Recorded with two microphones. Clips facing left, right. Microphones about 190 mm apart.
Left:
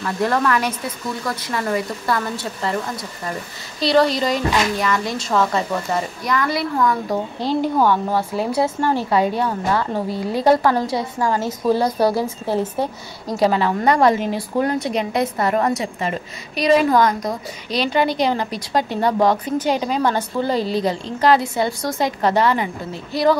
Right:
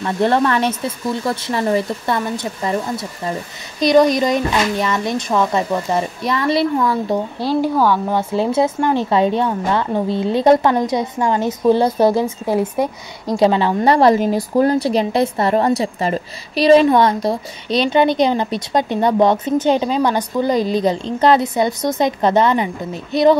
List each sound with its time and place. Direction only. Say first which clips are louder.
0.0 s a woman's voice: right 4 dB; 25° right (ahead or behind)
7.3 s a woman's voice: right 2 dB; 10° right (ahead or behind)
7.9 s a woman's voice: right 2 dB; 20° right (ahead or behind)
13.4 s a woman's voice: right 3 dB; 25° right (ahead or behind)